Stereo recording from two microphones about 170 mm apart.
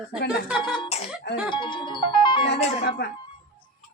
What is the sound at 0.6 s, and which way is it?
Speech, 25° left (ahead or behind).